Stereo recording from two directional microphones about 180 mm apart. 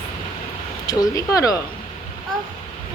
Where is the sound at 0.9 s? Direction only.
20° left (ahead or behind).